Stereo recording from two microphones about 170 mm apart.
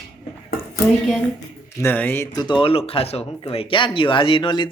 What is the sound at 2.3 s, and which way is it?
A man's voice, 25° left (ahead or behind).